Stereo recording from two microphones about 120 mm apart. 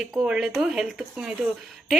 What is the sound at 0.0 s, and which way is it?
Speech, 5° right (ahead or behind).